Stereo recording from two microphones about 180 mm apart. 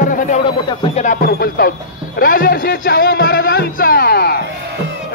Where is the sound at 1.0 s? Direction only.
50° left (ahead or behind).